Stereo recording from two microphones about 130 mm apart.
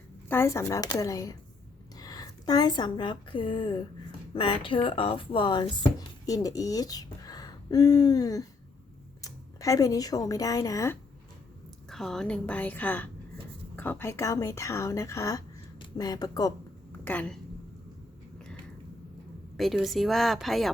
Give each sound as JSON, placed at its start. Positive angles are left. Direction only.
{"t": 0.3, "sound": "speech", "side_deg": 20}
{"t": 11.9, "sound": "a woman's voice", "side_deg": 5}
{"t": 17.0, "sound": "speech", "side_deg": 10}
{"t": 18.3, "sound": "a sound", "side_deg": 5}
{"t": 19.5, "sound": "speech", "side_deg": 0}